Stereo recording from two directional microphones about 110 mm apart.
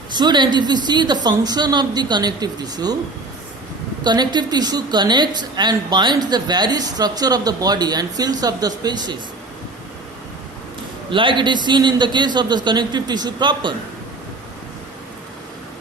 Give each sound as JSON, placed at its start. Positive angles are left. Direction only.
{"t": 0.1, "sound": "a woman's voice", "side_deg": -40}
{"t": 4.0, "sound": "a woman's voice", "side_deg": -40}
{"t": 11.1, "sound": "a man's voice", "side_deg": -50}